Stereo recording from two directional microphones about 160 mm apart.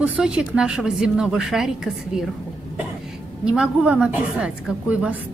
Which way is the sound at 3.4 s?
5° right (ahead or behind).